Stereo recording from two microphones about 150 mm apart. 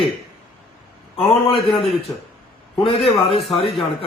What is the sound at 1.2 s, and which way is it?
Speech, 40° left (ahead or behind).